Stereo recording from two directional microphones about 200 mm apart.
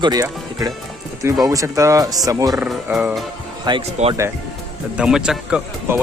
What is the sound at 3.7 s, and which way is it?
Speech, 20° right (ahead or behind).